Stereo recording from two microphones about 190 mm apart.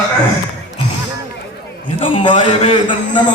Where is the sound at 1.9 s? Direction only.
25° left (ahead or behind).